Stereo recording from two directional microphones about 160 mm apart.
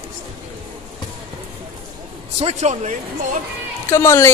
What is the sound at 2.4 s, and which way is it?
Speech, 45° right (ahead or behind).